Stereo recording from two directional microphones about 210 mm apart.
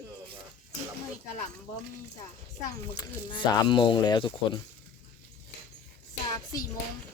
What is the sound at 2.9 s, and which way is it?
Speech, 20° left (ahead or behind).